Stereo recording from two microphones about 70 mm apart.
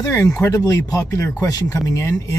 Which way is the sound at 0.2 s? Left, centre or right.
Left.